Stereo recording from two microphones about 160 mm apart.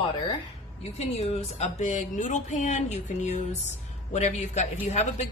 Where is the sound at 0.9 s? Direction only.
40° left (ahead or behind).